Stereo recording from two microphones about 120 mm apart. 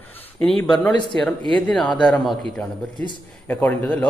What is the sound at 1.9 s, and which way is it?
Speech, 5° left (ahead or behind).